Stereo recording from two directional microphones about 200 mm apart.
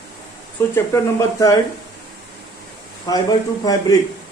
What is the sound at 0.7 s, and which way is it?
Speech, 15° left (ahead or behind).